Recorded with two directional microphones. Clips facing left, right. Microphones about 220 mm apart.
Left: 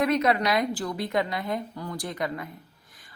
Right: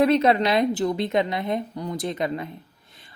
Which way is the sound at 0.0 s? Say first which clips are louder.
Right 5 dB; 30° right (ahead or behind).